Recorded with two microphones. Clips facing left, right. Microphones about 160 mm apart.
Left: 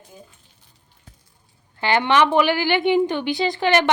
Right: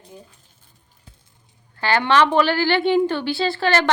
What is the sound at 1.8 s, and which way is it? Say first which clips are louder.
A woman's voice: even; 20° left (ahead or behind).